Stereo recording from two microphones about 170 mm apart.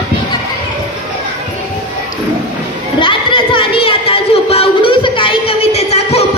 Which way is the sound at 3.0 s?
30° left (ahead or behind).